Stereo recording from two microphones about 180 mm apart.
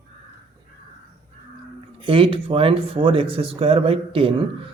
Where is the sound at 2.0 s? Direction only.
30° right (ahead or behind).